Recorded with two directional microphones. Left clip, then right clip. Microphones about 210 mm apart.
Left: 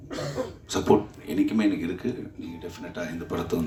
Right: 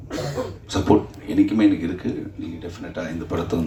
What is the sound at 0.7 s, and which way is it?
Speech, 55° left (ahead or behind).